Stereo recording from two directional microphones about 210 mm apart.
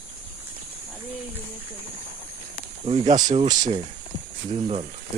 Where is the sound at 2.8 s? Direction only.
20° right (ahead or behind).